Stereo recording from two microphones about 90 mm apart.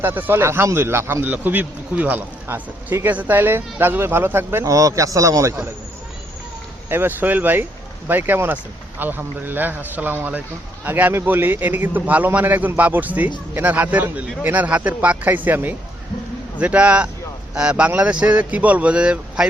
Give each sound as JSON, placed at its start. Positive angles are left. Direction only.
{"t": 0.0, "sound": "a man's voice", "side_deg": -25}
{"t": 4.7, "sound": "a man's voice", "side_deg": -40}
{"t": 6.8, "sound": "a man's voice", "side_deg": -25}